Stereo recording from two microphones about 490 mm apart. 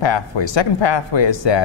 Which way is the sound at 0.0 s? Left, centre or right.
Left.